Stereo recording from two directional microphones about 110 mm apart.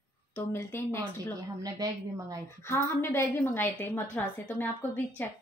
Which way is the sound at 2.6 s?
25° left (ahead or behind).